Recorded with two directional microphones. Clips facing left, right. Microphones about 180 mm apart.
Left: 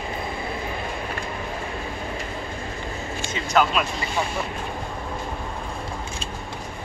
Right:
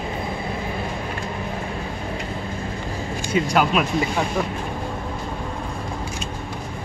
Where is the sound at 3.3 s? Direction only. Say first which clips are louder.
Right 2 dB; 10° right (ahead or behind).